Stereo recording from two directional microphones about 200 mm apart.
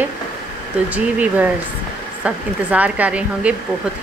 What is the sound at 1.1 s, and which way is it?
Speech, 10° right (ahead or behind).